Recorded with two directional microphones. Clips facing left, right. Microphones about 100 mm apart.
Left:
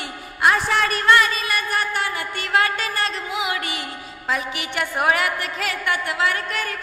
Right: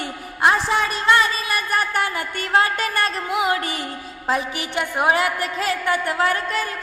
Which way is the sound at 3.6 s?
40° right (ahead or behind).